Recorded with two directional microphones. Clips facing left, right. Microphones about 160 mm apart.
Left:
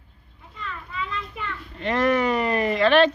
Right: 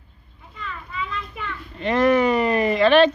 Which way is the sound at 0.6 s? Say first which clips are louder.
Right 1 dB; 5° right (ahead or behind).